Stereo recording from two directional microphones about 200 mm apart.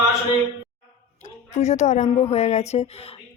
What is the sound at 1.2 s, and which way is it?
A woman's voice, 35° left (ahead or behind).